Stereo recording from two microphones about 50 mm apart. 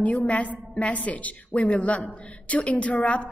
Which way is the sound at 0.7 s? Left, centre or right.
Left.